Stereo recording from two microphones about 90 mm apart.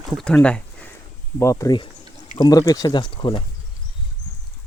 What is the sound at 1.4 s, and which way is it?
Speech, 35° left (ahead or behind).